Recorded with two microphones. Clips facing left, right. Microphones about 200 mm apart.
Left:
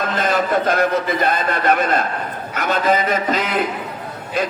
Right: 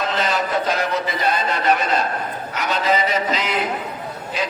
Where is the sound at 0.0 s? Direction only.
50° left (ahead or behind).